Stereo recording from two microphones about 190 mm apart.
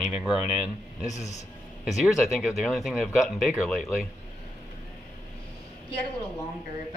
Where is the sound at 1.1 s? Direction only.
35° left (ahead or behind).